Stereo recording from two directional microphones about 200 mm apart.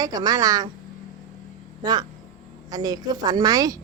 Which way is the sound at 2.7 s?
20° right (ahead or behind).